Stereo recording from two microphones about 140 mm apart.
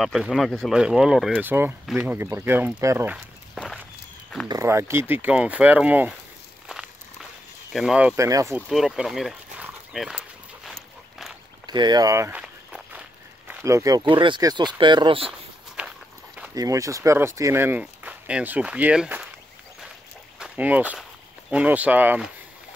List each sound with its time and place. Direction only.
0.0 s speech: centre (ahead or behind)
1.4 s speech: 15° right (ahead or behind)
3.5 s walk: 5° left (ahead or behind)
4.5 s speech: 20° right (ahead or behind)
7.7 s speech: 5° right (ahead or behind)
8.2 s speech: 25° right (ahead or behind)
8.5 s a sound: 5° right (ahead or behind)
11.6 s speech: 30° right (ahead or behind)
12.4 s walk: 10° right (ahead or behind)
13.5 s speech: 15° right (ahead or behind); by 15.3 s 40° right (ahead or behind)
15.8 s walk: 10° right (ahead or behind)
16.5 s speech: 25° right (ahead or behind)
20.3 s speech: 10° right (ahead or behind)